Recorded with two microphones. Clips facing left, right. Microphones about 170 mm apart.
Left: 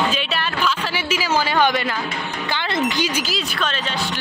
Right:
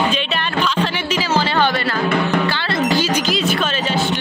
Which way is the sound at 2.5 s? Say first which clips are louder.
Right 1 dB; 15° left (ahead or behind).